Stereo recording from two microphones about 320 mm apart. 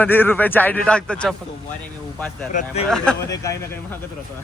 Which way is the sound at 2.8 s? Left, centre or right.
Centre.